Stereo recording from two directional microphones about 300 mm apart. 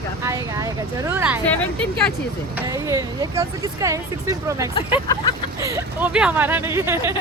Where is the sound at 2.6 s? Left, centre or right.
Centre.